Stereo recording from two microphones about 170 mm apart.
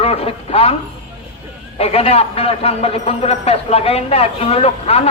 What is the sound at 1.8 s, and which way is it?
A man's voice, 35° left (ahead or behind).